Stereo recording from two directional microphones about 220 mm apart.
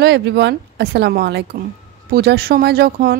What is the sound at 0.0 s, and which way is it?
Speech, 50° right (ahead or behind).